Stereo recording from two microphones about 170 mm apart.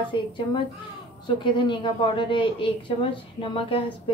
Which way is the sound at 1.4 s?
30° left (ahead or behind).